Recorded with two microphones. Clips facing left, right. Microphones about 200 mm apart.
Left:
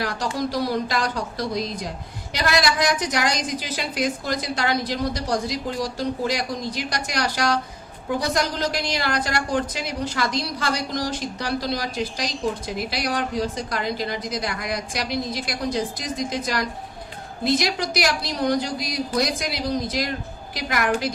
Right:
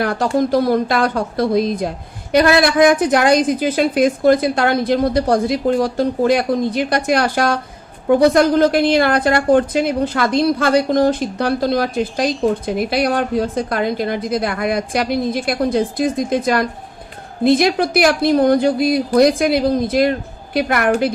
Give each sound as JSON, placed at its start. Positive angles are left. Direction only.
{"t": 0.0, "sound": "a woman's voice", "side_deg": -55}